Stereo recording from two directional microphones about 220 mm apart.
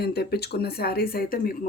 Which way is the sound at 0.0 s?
45° left (ahead or behind).